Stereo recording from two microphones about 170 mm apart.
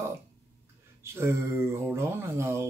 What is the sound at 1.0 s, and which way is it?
Speech, 15° right (ahead or behind).